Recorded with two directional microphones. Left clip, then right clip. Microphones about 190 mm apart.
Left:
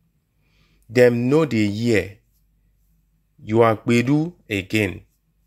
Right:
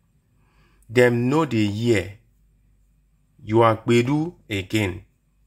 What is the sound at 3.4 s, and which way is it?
Speech, 40° left (ahead or behind).